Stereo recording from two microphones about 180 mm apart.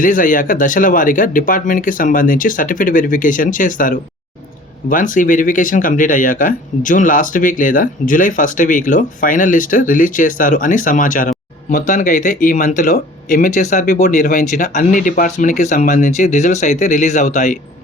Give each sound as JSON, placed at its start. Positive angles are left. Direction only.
{"t": 0.0, "sound": "speech", "side_deg": 50}